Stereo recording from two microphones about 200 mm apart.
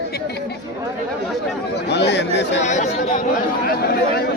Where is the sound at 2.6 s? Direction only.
35° left (ahead or behind).